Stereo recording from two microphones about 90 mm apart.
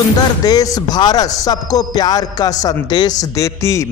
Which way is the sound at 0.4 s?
45° left (ahead or behind).